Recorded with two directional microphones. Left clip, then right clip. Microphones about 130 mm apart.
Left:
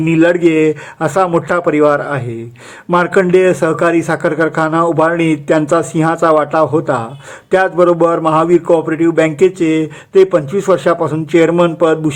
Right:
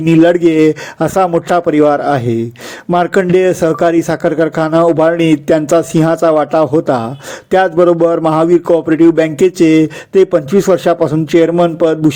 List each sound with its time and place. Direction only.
0.0 s a man's voice: 35° right (ahead or behind)